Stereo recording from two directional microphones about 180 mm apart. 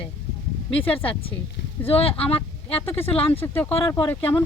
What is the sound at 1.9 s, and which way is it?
Speech, 30° left (ahead or behind).